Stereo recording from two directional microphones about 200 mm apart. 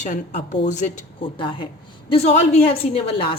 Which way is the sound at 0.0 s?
40° left (ahead or behind).